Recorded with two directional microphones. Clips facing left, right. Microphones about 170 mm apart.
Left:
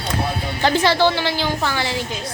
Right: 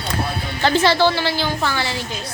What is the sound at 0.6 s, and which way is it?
A woman's voice, 15° left (ahead or behind).